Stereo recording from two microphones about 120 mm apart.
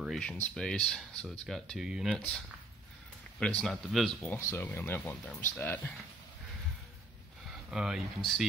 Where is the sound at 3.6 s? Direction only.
Centre (ahead or behind).